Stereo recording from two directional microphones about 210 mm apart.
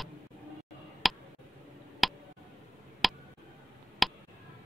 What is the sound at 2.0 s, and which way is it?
Tick, centre (ahead or behind).